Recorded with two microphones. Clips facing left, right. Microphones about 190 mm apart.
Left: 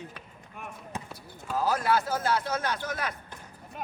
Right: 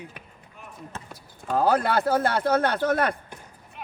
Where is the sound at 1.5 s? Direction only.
60° right (ahead or behind).